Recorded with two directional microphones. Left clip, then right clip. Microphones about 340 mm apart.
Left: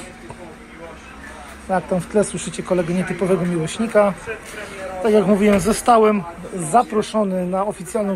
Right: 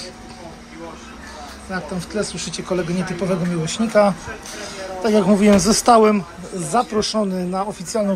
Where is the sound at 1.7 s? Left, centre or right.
Centre.